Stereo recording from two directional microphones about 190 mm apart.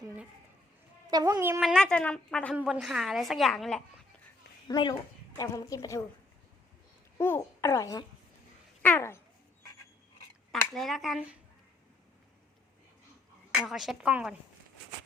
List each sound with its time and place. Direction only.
1.1 s a woman's voice: 20° right (ahead or behind)
1.6 s a woman's voice: 5° left (ahead or behind)
4.7 s a child's voice: 20° left (ahead or behind)
7.2 s a child's voice: 15° left (ahead or behind)
10.5 s a woman's voice: centre (ahead or behind)
13.6 s a woman's voice: centre (ahead or behind)